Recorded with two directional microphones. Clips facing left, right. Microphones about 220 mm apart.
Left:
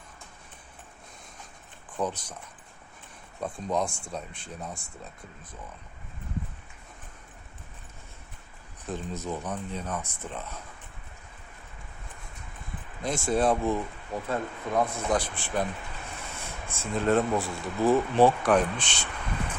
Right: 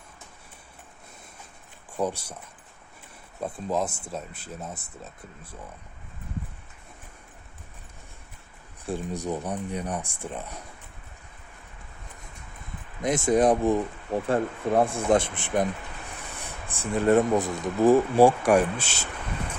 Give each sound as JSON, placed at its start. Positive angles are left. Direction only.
{"t": 1.9, "sound": "speech", "side_deg": -10}
{"t": 3.4, "sound": "speech", "side_deg": -5}
{"t": 8.9, "sound": "speech", "side_deg": -10}
{"t": 13.0, "sound": "speech", "side_deg": -20}
{"t": 14.1, "sound": "speech", "side_deg": -30}